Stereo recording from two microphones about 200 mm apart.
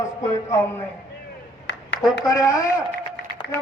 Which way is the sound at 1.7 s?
65° left (ahead or behind).